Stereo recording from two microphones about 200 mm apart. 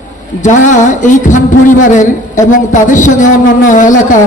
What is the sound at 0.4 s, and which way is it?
A woman's voice, 40° left (ahead or behind).